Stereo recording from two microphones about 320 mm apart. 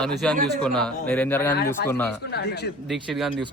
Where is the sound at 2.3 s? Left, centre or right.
Left.